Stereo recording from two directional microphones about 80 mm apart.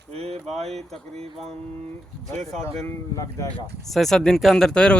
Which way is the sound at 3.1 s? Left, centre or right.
Left.